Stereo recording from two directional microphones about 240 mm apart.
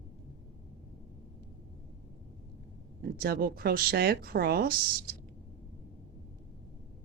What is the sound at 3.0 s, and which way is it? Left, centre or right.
Speech, right.